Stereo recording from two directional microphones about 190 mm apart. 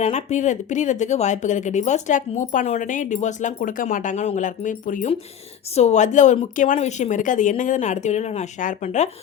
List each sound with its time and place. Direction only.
0.0 s speech: 35° left (ahead or behind)